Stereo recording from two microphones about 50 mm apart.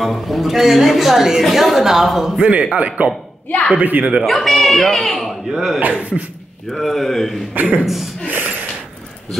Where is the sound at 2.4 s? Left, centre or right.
Right.